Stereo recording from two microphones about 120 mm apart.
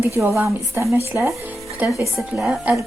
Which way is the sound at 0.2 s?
20° right (ahead or behind).